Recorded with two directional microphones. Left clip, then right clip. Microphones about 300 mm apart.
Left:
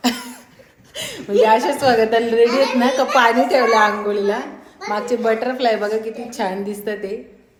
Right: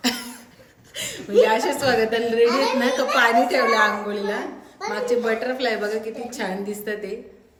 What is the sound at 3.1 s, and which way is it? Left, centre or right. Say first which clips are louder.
A woman's voice: left 3 dB; centre.